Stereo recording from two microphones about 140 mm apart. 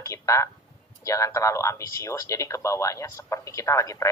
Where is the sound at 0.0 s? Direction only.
20° left (ahead or behind).